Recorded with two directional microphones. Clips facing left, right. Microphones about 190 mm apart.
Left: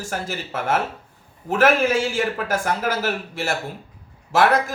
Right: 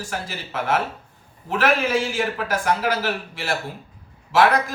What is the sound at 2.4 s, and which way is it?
Speech, 50° left (ahead or behind).